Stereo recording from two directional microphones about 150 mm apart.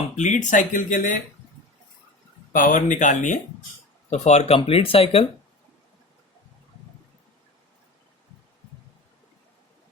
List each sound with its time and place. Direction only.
0.2 s speech: 55° left (ahead or behind)
2.5 s speech: 60° left (ahead or behind); by 5.2 s 40° left (ahead or behind)